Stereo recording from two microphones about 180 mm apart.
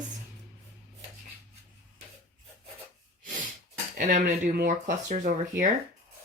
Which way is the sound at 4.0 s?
45° right (ahead or behind).